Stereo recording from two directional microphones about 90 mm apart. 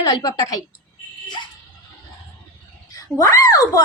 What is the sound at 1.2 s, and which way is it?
Dog, 55° left (ahead or behind).